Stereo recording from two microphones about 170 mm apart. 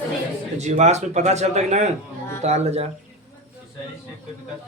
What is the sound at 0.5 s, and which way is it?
Speech, 40° right (ahead or behind).